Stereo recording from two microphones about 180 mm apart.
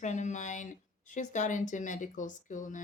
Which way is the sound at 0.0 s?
40° left (ahead or behind).